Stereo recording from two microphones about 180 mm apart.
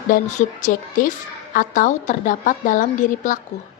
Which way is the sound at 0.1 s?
45° left (ahead or behind).